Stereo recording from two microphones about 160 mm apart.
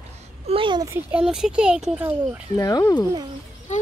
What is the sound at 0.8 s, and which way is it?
Speech, 15° right (ahead or behind).